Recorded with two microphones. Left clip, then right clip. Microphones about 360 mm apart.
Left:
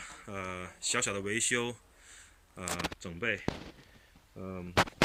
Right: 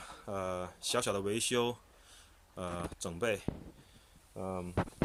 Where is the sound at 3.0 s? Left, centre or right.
Centre.